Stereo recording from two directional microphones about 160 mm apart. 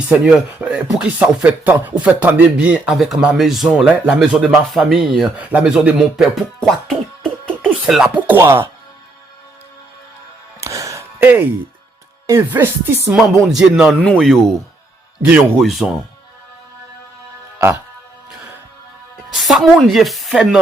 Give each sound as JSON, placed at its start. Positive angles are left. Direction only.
{"t": 0.1, "sound": "speech", "side_deg": -5}
{"t": 6.7, "sound": "music", "side_deg": 0}
{"t": 10.6, "sound": "a sound", "side_deg": -20}
{"t": 12.3, "sound": "music", "side_deg": -15}
{"t": 13.5, "sound": "speech", "side_deg": 0}
{"t": 15.2, "sound": "music", "side_deg": -10}
{"t": 15.6, "sound": "speech", "side_deg": 0}
{"t": 19.1, "sound": "speech", "side_deg": 0}